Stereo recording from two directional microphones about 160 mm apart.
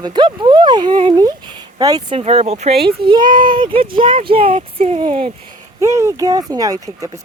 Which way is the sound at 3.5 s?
30° right (ahead or behind).